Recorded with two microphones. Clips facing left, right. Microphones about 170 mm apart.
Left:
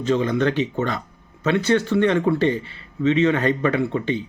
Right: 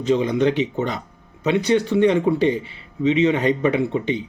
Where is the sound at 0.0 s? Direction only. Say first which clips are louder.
Right 2 dB; 15° right (ahead or behind).